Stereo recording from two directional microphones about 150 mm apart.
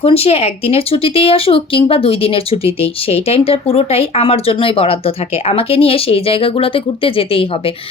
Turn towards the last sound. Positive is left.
turn(degrees=40)  # may be behind; listen again after turning